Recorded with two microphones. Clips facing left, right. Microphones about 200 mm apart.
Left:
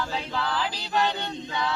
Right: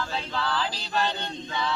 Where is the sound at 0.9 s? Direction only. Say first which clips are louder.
Left 3 dB; 15° left (ahead or behind).